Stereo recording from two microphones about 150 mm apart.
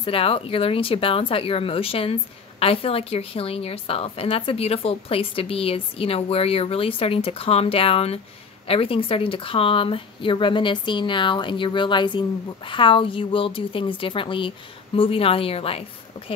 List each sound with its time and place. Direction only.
0.0 s speech: 40° left (ahead or behind)